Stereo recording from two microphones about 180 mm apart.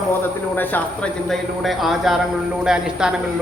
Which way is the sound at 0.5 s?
10° left (ahead or behind).